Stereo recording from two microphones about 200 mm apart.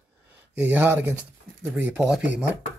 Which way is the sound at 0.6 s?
10° right (ahead or behind).